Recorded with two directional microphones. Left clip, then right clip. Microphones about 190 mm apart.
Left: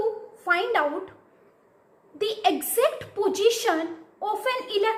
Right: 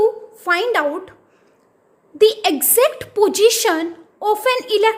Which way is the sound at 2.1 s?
60° right (ahead or behind).